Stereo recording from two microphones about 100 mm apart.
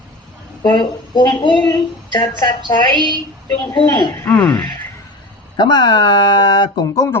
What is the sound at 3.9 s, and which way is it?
Speech, 45° left (ahead or behind).